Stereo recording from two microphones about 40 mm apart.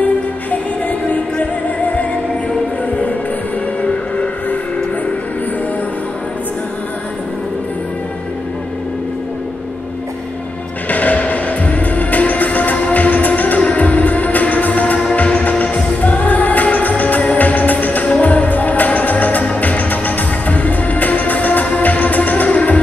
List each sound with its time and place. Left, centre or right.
0.0 s music: left
3.8 s music: left
10.9 s music: left